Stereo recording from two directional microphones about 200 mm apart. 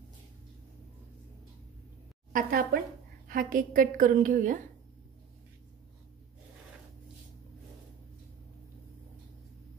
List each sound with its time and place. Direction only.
2.3 s a woman's voice: 45° right (ahead or behind)